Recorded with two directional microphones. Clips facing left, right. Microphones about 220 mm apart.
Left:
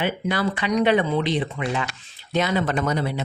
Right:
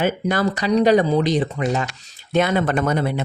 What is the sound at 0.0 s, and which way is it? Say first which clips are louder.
Speech: right 4 dB; 45° right (ahead or behind).